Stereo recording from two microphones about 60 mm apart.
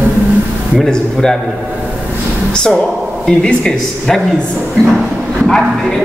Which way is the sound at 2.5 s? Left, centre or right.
Centre.